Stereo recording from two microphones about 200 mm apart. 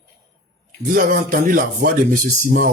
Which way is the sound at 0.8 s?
45° right (ahead or behind).